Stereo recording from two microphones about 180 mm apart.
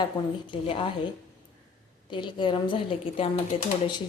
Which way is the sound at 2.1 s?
25° left (ahead or behind).